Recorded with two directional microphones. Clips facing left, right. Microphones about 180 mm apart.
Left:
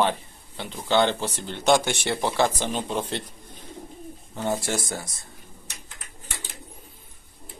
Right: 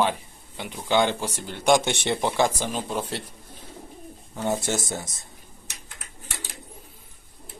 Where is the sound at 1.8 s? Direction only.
25° right (ahead or behind); by 3.2 s 5° right (ahead or behind).